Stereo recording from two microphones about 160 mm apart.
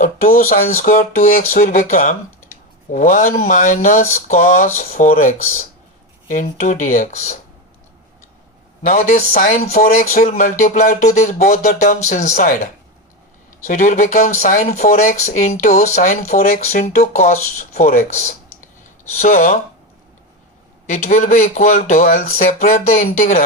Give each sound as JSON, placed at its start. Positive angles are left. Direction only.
{"t": 0.0, "sound": "speech", "side_deg": 60}
{"t": 8.8, "sound": "speech", "side_deg": 55}
{"t": 16.6, "sound": "speech", "side_deg": 45}
{"t": 20.8, "sound": "speech", "side_deg": 50}